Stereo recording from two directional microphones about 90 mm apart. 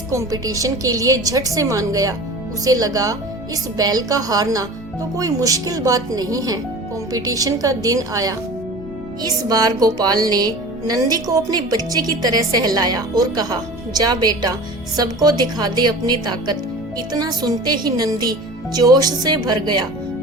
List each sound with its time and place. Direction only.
0.1 s a woman's voice: 40° right (ahead or behind)
9.2 s music: 45° right (ahead or behind)